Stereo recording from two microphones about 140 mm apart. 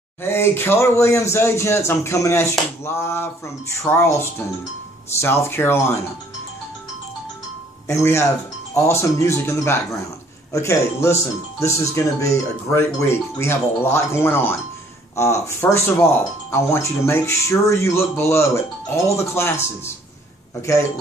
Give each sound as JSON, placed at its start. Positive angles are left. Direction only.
{"t": 0.2, "sound": "speech", "side_deg": 15}
{"t": 5.1, "sound": "speech", "side_deg": 20}
{"t": 7.8, "sound": "speech", "side_deg": 20}